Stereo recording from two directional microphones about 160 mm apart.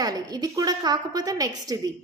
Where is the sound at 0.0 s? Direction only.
25° right (ahead or behind).